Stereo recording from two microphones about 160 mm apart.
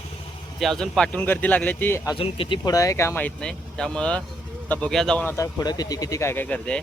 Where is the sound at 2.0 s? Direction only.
35° left (ahead or behind); by 5.4 s 5° left (ahead or behind).